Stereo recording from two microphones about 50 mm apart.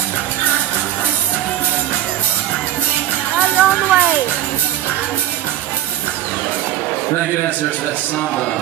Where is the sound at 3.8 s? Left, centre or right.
Right.